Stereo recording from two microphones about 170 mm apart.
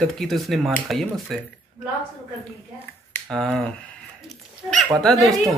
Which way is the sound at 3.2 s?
Centre (ahead or behind).